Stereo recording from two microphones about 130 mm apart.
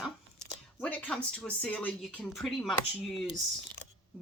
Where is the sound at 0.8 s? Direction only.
10° left (ahead or behind).